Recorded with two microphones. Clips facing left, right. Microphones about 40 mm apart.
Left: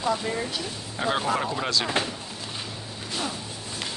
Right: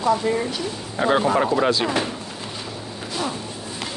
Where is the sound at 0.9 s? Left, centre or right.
Centre.